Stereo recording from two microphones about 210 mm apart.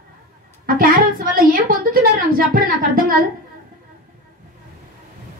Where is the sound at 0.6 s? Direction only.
40° right (ahead or behind).